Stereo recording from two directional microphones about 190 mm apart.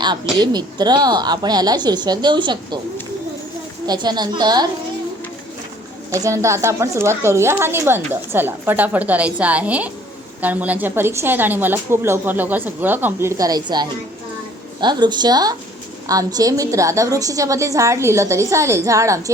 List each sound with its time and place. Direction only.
0.3 s a woman's voice: 20° right (ahead or behind)
3.8 s a woman's voice: 20° right (ahead or behind)
6.1 s a woman's voice: 15° right (ahead or behind)